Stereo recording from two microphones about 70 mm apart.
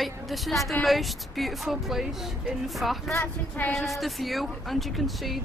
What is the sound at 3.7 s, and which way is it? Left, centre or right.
Speech, centre.